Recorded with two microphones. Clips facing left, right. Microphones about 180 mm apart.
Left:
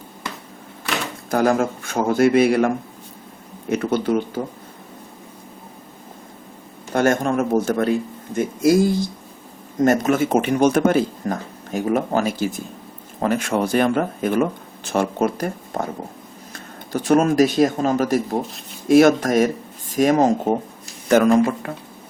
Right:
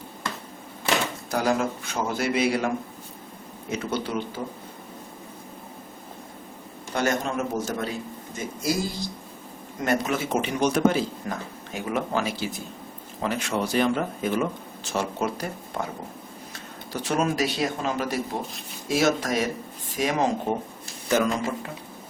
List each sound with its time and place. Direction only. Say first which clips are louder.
1.3 s speech: left 7 dB; 50° left (ahead or behind)
6.9 s speech: left 7 dB; 50° left (ahead or behind)
16.9 s speech: left 9 dB; 50° left (ahead or behind)